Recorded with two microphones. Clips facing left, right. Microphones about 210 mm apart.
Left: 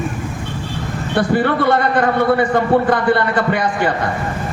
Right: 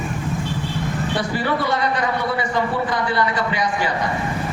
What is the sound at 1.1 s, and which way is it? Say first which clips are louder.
A man's voice: left 9 dB; 55° left (ahead or behind).